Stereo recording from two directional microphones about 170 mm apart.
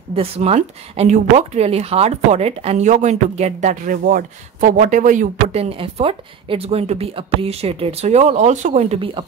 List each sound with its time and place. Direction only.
0.1 s a woman's voice: 35° right (ahead or behind)